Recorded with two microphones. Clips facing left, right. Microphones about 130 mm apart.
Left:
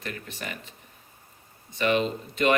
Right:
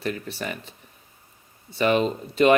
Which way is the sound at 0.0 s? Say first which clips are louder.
Right 7 dB; 35° right (ahead or behind).